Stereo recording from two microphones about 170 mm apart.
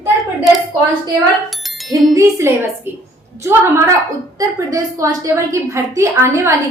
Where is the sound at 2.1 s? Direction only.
15° right (ahead or behind).